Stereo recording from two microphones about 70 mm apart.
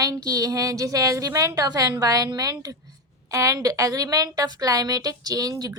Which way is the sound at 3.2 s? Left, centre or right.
Right.